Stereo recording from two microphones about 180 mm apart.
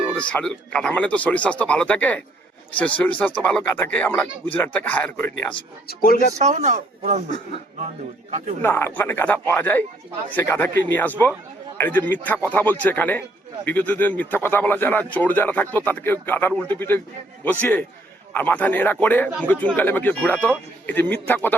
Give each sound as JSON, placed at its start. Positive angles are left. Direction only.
{"t": 0.1, "sound": "a man's voice", "side_deg": 5}
{"t": 5.9, "sound": "speech", "side_deg": 55}
{"t": 6.4, "sound": "speech", "side_deg": -40}
{"t": 7.3, "sound": "speech", "side_deg": 25}
{"t": 8.3, "sound": "speech", "side_deg": -40}
{"t": 8.6, "sound": "a man's voice", "side_deg": 10}